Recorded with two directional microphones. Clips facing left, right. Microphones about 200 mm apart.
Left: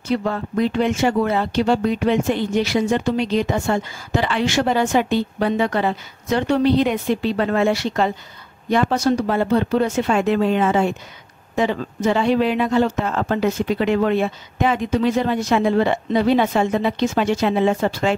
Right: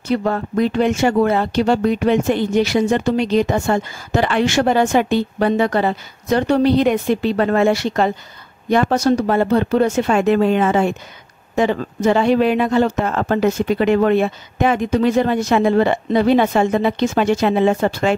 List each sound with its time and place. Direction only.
0.1 s speech: 50° right (ahead or behind)